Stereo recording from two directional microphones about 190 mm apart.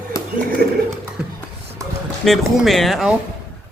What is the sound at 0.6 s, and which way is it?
Speech, 55° right (ahead or behind).